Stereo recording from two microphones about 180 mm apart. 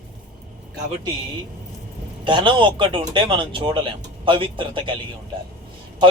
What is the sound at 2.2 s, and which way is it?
A man's voice, 25° right (ahead or behind).